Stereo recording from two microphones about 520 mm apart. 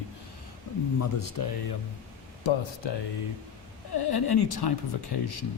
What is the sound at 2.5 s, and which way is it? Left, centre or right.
Speech, left.